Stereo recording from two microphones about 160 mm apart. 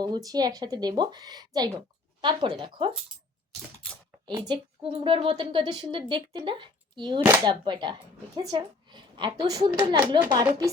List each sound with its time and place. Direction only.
0.0 s a woman's voice: 25° right (ahead or behind)
4.3 s a woman's voice: 30° right (ahead or behind)